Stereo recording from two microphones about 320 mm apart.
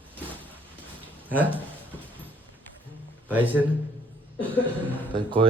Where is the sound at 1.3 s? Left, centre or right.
Centre.